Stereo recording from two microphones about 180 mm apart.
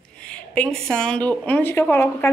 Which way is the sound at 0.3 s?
5° left (ahead or behind).